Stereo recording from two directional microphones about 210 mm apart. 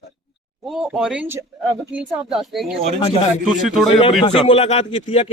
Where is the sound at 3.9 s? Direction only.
25° left (ahead or behind).